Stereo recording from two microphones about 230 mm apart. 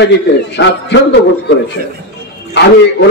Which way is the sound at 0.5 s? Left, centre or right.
Left.